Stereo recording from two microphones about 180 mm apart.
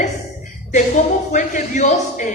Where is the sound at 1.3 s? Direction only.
45° left (ahead or behind).